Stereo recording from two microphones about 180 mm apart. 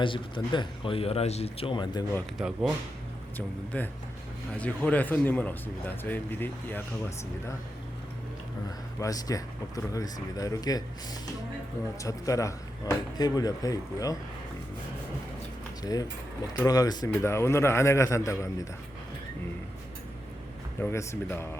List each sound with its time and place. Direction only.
0.0 s speech: 25° left (ahead or behind)
2.4 s speech: 5° right (ahead or behind)
3.3 s speech: 10° left (ahead or behind)
9.0 s speech: 20° left (ahead or behind)
12.0 s speech: 20° left (ahead or behind)
15.8 s speech: 20° left (ahead or behind)
20.8 s speech: 15° left (ahead or behind)